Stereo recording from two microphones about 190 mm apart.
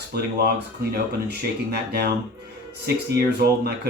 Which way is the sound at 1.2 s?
60° right (ahead or behind).